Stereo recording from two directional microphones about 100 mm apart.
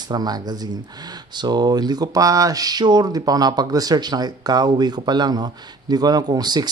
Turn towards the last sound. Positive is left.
turn(degrees=-45)  # may be behind; listen again after turning